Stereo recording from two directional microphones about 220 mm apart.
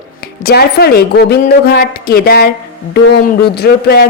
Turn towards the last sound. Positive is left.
turn(degrees=45)  # may be behind; listen again after turning